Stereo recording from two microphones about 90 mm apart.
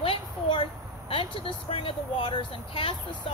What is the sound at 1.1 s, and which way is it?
Speech, 85° left.